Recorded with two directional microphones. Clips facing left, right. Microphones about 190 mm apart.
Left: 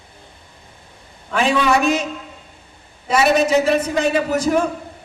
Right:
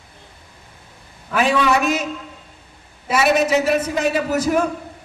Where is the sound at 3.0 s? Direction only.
5° right (ahead or behind).